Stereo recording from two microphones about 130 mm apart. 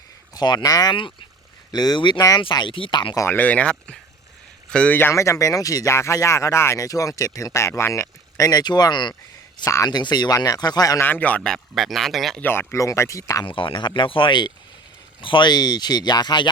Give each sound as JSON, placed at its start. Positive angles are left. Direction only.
{"t": 0.3, "sound": "speech", "side_deg": 30}
{"t": 3.2, "sound": "speech", "side_deg": 15}
{"t": 11.0, "sound": "speech", "side_deg": 15}
{"t": 12.4, "sound": "speech", "side_deg": 15}
{"t": 13.4, "sound": "speech", "side_deg": 40}